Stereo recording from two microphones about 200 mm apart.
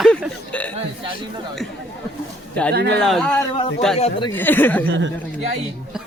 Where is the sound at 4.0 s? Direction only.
25° left (ahead or behind).